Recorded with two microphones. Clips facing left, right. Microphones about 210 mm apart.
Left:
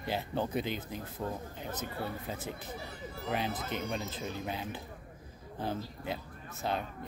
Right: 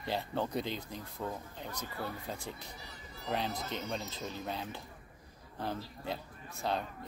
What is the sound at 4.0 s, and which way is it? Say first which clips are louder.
Speech: left 3 dB; 55° left (ahead or behind).